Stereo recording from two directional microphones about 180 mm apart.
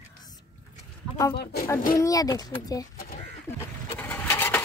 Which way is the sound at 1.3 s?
65° left (ahead or behind).